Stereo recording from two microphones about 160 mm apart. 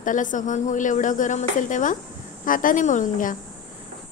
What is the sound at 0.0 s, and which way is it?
A woman's voice, 55° left (ahead or behind).